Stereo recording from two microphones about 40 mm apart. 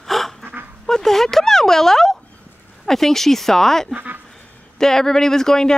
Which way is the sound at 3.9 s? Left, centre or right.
Right.